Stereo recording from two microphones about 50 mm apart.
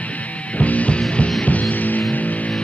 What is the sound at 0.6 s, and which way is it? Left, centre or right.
Music, left.